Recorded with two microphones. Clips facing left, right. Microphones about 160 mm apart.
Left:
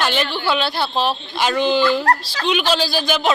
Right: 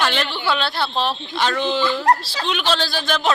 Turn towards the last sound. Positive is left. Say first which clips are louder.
# left 2 dB
turn(degrees=5)  # may be behind; listen again after turning